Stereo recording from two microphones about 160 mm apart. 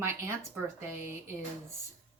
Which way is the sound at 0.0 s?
15° right (ahead or behind).